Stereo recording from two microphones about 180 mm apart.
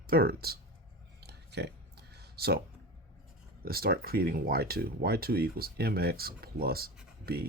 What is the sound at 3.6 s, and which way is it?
Speech, 55° right (ahead or behind).